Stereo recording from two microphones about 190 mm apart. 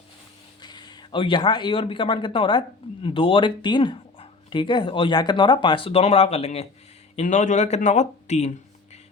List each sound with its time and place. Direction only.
0.6 s speech: 20° left (ahead or behind)